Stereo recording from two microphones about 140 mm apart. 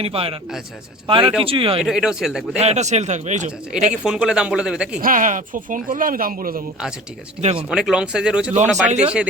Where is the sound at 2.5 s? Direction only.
55° right (ahead or behind).